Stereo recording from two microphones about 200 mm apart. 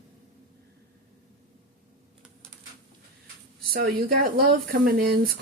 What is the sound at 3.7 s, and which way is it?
Speech, 45° right (ahead or behind).